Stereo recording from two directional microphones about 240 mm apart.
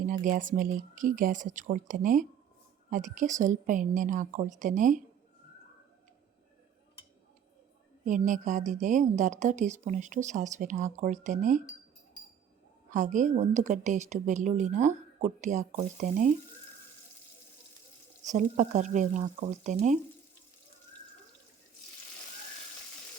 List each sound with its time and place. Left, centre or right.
0.1 s a woman's voice: right
8.0 s a woman's voice: right
12.9 s a woman's voice: right
18.2 s a woman's voice: right